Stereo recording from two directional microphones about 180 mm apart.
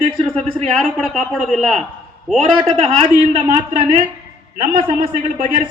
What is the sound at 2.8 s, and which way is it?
Speech, 35° right (ahead or behind).